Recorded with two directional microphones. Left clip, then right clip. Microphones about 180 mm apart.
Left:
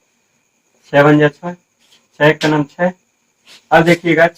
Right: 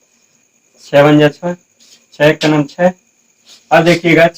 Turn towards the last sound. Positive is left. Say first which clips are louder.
# right 2 dB
turn(degrees=-20)  # may be behind; listen again after turning